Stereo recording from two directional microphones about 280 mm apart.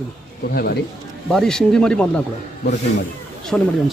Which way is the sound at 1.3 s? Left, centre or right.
Centre.